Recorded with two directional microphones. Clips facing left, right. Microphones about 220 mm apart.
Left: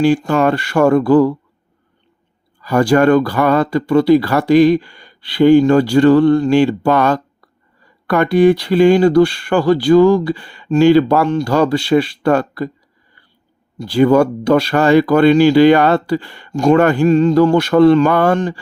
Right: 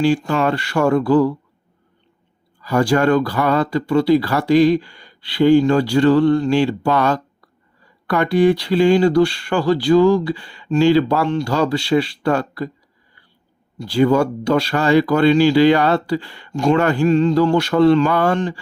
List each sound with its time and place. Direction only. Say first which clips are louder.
0.0 s speech: left 4 dB; 50° left (ahead or behind)
2.6 s speech: left 4 dB; 55° left (ahead or behind)
13.7 s speech: left 4 dB; 55° left (ahead or behind)